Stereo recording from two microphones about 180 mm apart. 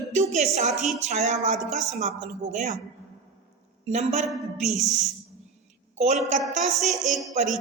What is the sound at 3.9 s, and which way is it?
Speech, 40° right (ahead or behind).